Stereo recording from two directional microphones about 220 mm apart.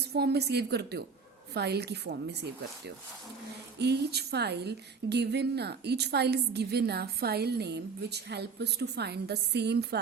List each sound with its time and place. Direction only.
0.0 s a woman's voice: 50° right (ahead or behind)